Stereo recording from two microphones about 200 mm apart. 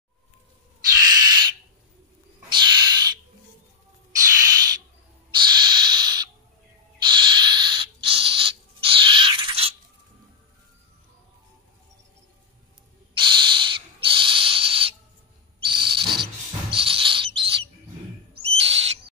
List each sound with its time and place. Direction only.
1.0 s owl: 20° right (ahead or behind)
2.5 s owl: 20° right (ahead or behind)
4.2 s owl: 20° right (ahead or behind)
13.1 s owl: 25° right (ahead or behind)
16.7 s bird: 25° right (ahead or behind)
18.3 s owl: 30° right (ahead or behind)